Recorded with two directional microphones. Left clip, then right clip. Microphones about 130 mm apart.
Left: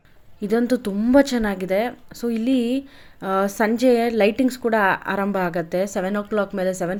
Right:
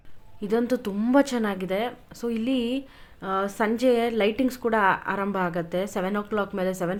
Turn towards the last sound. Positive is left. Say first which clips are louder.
# left 4 dB
turn(degrees=20)  # may be behind; listen again after turning